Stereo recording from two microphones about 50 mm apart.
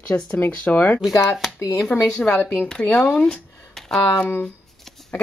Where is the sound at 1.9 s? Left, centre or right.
Left.